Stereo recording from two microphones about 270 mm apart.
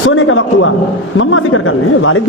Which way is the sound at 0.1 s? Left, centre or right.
Left.